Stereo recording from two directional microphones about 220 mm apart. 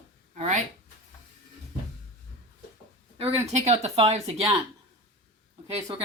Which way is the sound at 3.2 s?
30° right (ahead or behind).